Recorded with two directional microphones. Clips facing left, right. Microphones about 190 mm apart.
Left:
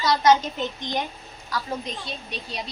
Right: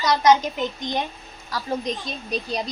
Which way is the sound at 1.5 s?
35° right (ahead or behind).